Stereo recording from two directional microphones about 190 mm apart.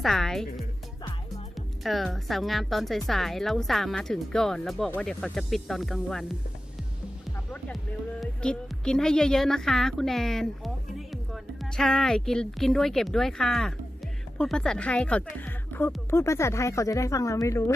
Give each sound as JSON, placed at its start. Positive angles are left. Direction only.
{"t": 0.0, "sound": "speech", "side_deg": 0}
{"t": 1.8, "sound": "speech", "side_deg": 0}
{"t": 8.2, "sound": "speech", "side_deg": 5}